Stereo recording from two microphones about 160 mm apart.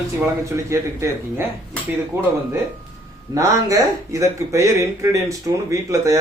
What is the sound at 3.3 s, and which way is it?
Speech, 20° right (ahead or behind).